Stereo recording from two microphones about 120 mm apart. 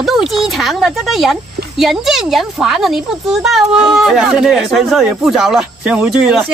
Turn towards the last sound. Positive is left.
turn(degrees=-5)  # may be behind; listen again after turning